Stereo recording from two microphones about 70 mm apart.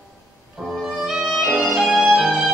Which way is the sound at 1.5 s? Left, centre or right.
Centre.